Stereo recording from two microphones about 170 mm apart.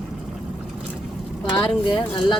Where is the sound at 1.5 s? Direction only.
30° left (ahead or behind).